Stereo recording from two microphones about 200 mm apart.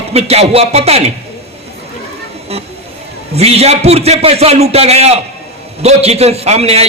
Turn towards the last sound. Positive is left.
turn(degrees=-30)  # may be behind; listen again after turning